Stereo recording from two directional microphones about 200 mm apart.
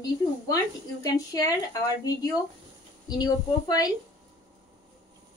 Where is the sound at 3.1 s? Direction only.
20° left (ahead or behind).